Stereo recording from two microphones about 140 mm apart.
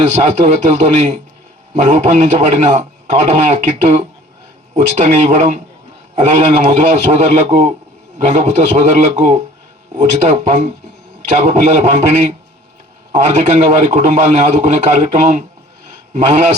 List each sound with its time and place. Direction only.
0.0 s a man's voice: 55° right (ahead or behind)
13.2 s a man's voice: 55° right (ahead or behind)